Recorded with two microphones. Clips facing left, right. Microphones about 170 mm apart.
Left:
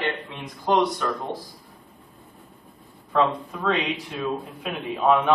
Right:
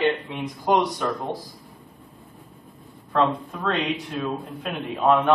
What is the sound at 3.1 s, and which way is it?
Speech, centre (ahead or behind).